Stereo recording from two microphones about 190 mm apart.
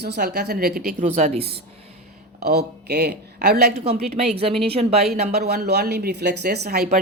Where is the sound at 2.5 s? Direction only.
60° right (ahead or behind).